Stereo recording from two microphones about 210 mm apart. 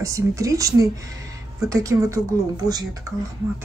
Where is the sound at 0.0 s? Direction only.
15° right (ahead or behind).